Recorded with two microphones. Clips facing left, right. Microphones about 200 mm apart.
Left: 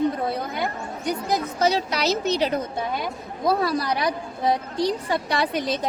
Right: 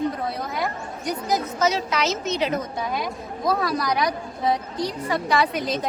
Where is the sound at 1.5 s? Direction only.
30° left (ahead or behind).